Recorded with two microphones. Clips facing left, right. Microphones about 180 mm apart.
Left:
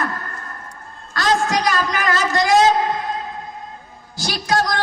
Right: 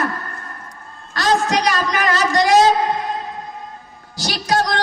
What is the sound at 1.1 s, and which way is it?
A man's voice, 20° right (ahead or behind).